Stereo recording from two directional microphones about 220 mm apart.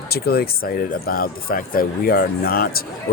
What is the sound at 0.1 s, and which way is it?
Speech, 45° left (ahead or behind).